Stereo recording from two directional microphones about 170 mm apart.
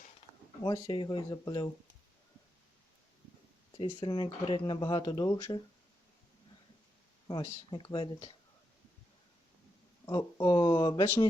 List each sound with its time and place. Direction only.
0.6 s speech: 25° left (ahead or behind)
3.8 s speech: 25° left (ahead or behind)
7.3 s speech: 25° left (ahead or behind)
10.1 s speech: 25° left (ahead or behind)